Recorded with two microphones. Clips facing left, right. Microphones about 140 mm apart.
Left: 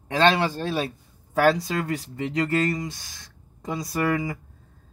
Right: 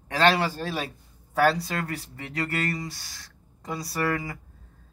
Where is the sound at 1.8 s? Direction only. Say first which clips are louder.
Left 6 dB; 20° left (ahead or behind).